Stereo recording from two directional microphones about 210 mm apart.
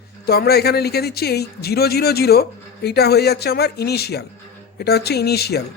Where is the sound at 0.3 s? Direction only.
50° left (ahead or behind).